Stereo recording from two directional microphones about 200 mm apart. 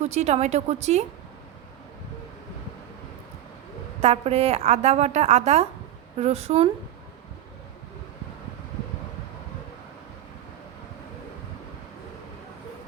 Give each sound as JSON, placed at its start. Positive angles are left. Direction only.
{"t": 0.0, "sound": "a woman's voice", "side_deg": -35}
{"t": 4.0, "sound": "a woman's voice", "side_deg": -30}